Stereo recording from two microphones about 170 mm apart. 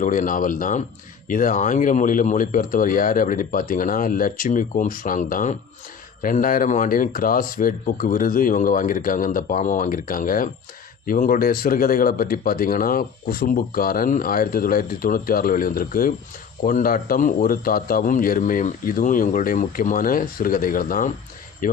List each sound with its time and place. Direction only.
0.0 s speech: 50° left (ahead or behind)